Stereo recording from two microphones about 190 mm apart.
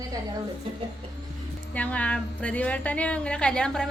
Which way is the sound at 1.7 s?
5° left (ahead or behind).